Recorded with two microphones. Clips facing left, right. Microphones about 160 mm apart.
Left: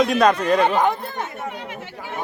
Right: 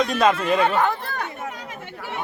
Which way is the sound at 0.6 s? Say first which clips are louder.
Left 2 dB; 15° left (ahead or behind).